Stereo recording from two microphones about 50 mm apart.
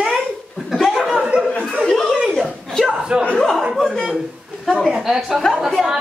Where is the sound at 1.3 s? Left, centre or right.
Centre.